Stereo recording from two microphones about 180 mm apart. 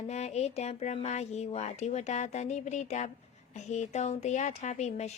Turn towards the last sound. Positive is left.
turn(degrees=40)  # may be behind; listen again after turning